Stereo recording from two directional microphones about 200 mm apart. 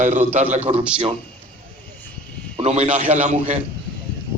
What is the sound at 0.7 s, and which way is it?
Speech, 20° right (ahead or behind).